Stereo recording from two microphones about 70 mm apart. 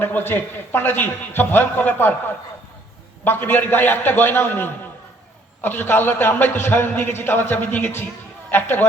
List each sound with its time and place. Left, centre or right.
0.0 s a man's voice: left